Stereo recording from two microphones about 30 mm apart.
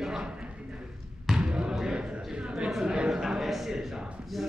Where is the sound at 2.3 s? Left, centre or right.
Right.